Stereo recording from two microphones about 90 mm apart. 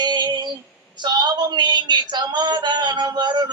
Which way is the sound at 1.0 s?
55° right (ahead or behind).